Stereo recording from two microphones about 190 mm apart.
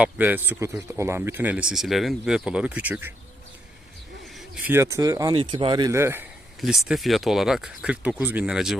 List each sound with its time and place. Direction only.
0.0 s speech: 10° right (ahead or behind)
4.4 s speech: 10° right (ahead or behind)
6.6 s speech: centre (ahead or behind)